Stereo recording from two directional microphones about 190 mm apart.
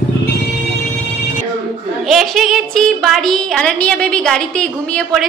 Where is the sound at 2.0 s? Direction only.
Centre (ahead or behind).